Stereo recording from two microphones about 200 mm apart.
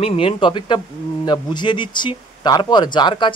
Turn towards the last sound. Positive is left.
turn(degrees=25)  # may be behind; listen again after turning